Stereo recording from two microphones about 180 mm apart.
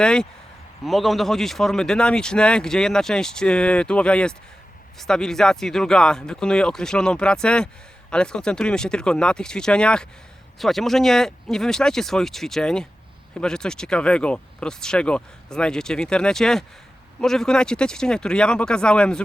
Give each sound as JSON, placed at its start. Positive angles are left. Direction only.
{"t": 0.0, "sound": "a man's voice", "side_deg": 5}